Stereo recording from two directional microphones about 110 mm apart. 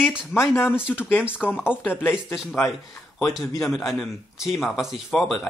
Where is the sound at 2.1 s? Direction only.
5° right (ahead or behind).